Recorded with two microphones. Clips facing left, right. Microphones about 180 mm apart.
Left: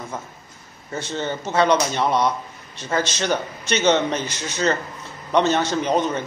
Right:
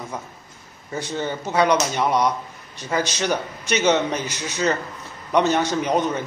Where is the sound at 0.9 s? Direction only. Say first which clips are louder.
Even; 10° right (ahead or behind).